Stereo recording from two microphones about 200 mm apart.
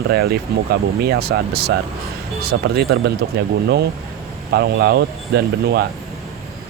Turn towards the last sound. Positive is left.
turn(degrees=-50)  # may be behind; listen again after turning